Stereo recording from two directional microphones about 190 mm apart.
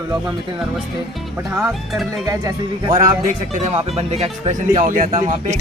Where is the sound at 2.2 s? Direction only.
20° right (ahead or behind).